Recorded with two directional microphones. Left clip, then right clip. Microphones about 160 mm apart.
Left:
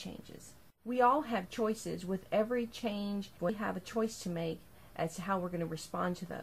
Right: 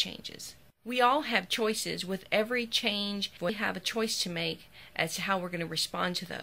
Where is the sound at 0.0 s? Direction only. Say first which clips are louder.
Right 14 dB; centre (ahead or behind).